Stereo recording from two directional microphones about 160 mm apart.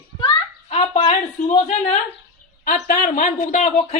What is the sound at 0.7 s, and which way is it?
A woman's voice, 40° left (ahead or behind).